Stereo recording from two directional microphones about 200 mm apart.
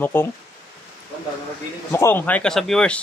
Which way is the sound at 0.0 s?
10° left (ahead or behind).